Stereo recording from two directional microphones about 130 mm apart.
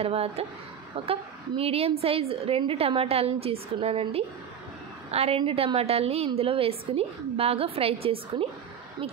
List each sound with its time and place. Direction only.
0.0 s a woman's voice: 50° right (ahead or behind)